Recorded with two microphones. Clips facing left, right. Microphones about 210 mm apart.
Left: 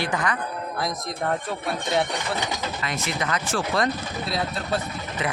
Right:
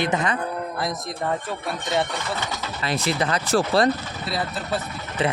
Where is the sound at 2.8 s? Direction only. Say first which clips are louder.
Right 6 dB; 35° right (ahead or behind).